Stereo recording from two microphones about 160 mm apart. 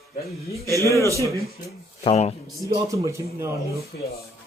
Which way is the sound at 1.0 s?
20° right (ahead or behind).